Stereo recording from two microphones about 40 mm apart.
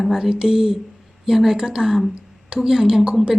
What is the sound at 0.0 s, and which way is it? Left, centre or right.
Speech, centre.